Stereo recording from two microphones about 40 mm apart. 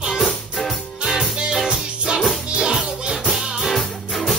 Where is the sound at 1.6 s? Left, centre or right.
Centre.